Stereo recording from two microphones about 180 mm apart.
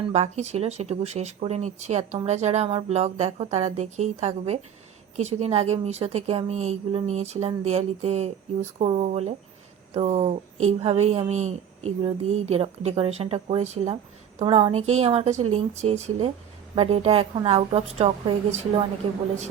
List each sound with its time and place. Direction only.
0.1 s a woman's voice: 40° right (ahead or behind)